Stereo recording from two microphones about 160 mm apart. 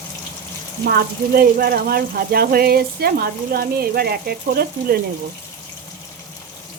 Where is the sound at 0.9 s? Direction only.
75° right (ahead or behind).